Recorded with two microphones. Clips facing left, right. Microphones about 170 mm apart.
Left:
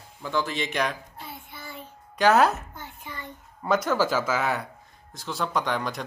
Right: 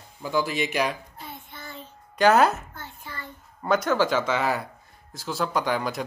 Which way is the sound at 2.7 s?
15° left (ahead or behind).